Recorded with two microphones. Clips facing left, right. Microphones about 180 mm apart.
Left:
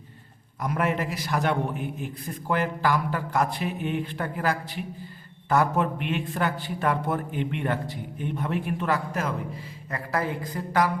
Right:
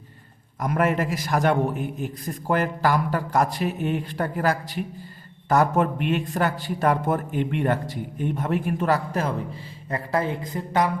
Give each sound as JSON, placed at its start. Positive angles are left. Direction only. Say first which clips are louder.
{"t": 0.6, "sound": "a man's voice", "louder": "right 4 dB", "side_deg": -45}